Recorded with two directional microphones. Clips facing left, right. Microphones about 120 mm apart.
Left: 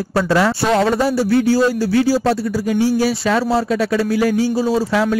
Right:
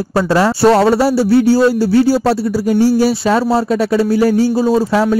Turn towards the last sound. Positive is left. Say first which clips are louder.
# right 4 dB
turn(degrees=-35)  # may be behind; listen again after turning